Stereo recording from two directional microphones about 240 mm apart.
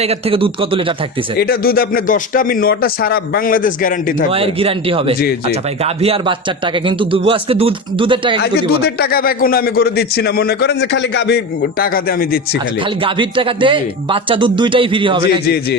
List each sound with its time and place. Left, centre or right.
0.0 s a man's voice: right
1.4 s a man's voice: left
4.3 s a man's voice: right
8.4 s a man's voice: left
13.0 s a man's voice: right